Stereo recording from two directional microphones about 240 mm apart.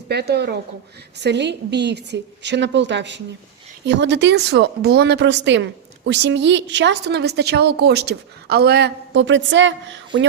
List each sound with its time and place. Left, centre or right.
0.1 s a woman's voice: right